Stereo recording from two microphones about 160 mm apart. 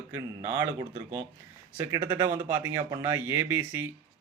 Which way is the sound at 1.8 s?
15° right (ahead or behind).